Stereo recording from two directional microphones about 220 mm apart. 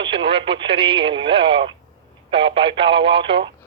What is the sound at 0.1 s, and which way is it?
Speech, 25° right (ahead or behind).